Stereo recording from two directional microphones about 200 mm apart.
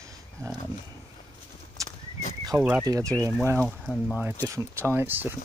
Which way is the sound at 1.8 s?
15° right (ahead or behind).